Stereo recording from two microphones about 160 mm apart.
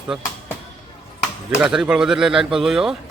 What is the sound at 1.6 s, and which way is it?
Speech, 5° right (ahead or behind).